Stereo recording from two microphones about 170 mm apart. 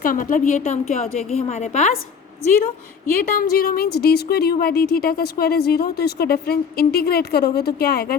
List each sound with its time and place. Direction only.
0.0 s a woman's voice: 55° left (ahead or behind)
3.2 s a woman's voice: 60° left (ahead or behind)